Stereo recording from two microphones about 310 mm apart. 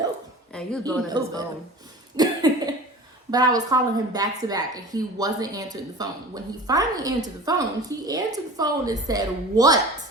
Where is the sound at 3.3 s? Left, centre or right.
Centre.